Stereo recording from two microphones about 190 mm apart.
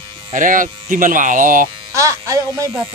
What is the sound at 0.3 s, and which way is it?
Speech, 45° right (ahead or behind).